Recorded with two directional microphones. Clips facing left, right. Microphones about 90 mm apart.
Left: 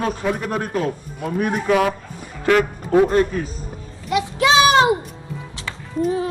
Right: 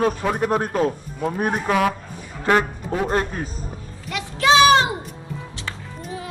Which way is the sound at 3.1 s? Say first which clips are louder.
Left 5 dB; 35° right (ahead or behind).